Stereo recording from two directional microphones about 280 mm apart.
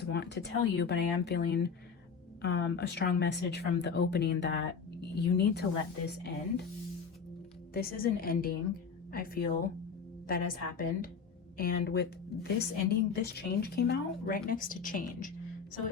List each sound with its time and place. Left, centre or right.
0.0 s a woman's voice: left
7.7 s a woman's voice: left